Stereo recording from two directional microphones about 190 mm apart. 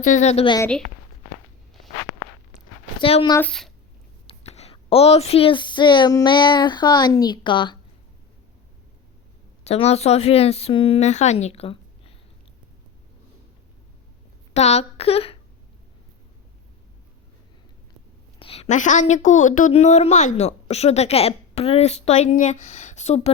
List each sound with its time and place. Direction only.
0.0 s a woman's voice: 40° left (ahead or behind)
3.0 s speech: 30° left (ahead or behind)
3.3 s speech: 5° left (ahead or behind)
4.3 s speech: 35° left (ahead or behind)
9.6 s a woman's voice: 35° left (ahead or behind)
14.5 s a woman's voice: 35° left (ahead or behind)
18.3 s a woman's voice: 30° left (ahead or behind)